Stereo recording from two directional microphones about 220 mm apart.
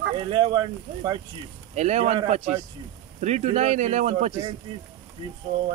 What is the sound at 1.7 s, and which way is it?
Speech, 30° right (ahead or behind).